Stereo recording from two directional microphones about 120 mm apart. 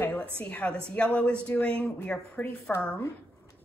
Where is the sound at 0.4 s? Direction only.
10° left (ahead or behind).